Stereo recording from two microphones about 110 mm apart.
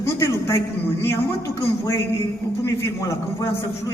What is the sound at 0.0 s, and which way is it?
A man's voice, 25° left (ahead or behind).